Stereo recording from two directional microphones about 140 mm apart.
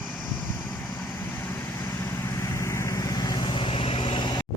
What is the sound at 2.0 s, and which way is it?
Vehicle, 20° left (ahead or behind).